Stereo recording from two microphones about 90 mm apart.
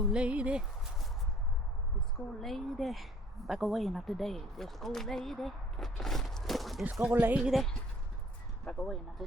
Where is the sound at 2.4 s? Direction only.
Centre (ahead or behind).